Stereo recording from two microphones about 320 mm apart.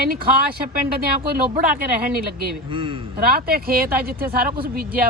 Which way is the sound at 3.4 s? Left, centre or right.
Right.